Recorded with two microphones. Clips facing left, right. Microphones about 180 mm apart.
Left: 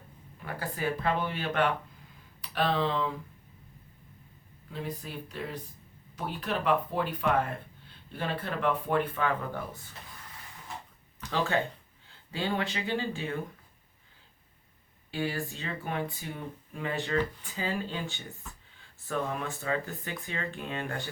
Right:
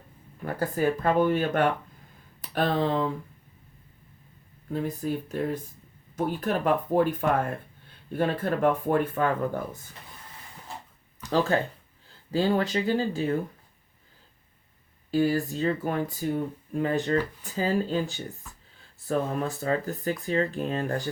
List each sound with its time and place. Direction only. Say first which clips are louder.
0.4 s speech: right 7 dB; 45° right (ahead or behind)
4.7 s speech: right 9 dB; 45° right (ahead or behind)
11.3 s speech: right 5 dB; 40° right (ahead or behind)
15.1 s speech: right 9 dB; 40° right (ahead or behind)